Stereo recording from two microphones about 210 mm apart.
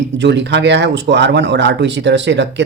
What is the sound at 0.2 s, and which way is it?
Speech, 55° right (ahead or behind).